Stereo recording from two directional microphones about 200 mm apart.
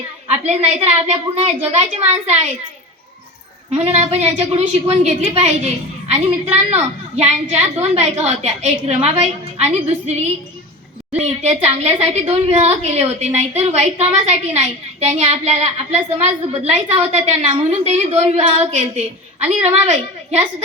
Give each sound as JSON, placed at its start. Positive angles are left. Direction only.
{"t": 0.4, "sound": "a woman's voice", "side_deg": -35}
{"t": 3.8, "sound": "a woman's voice", "side_deg": -30}